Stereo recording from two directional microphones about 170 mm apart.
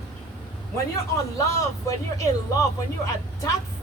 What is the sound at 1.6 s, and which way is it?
A woman's voice, 20° left (ahead or behind).